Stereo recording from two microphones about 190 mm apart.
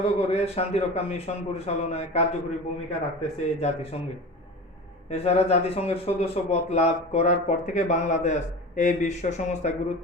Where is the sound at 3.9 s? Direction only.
35° left (ahead or behind).